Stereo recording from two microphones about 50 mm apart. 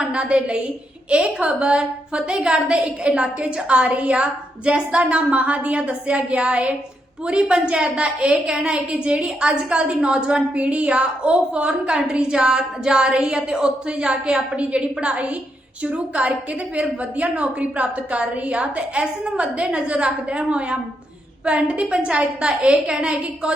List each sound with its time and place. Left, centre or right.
0.0 s a woman's voice: right